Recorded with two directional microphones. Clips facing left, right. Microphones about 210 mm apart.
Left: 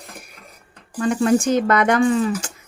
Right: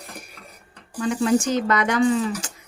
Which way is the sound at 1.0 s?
50° left (ahead or behind).